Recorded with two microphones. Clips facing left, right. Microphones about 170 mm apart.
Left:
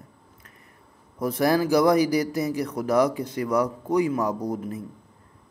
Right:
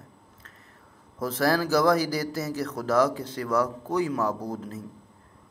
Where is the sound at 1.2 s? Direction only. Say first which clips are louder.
Left 3 dB; 15° left (ahead or behind).